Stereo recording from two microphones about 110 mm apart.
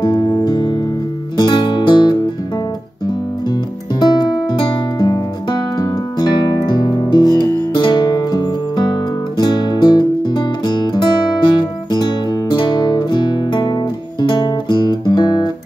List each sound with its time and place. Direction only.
0.0 s music: 40° left (ahead or behind)
4.0 s music: 40° left (ahead or behind)